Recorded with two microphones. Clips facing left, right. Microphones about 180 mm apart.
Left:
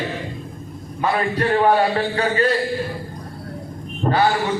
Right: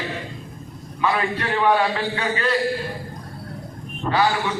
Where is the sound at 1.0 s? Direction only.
40° left (ahead or behind).